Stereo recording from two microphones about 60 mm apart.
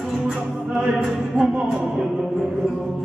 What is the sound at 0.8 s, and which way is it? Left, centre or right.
Music, centre.